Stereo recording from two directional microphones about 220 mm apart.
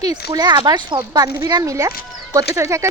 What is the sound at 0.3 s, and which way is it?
Speech, 15° right (ahead or behind).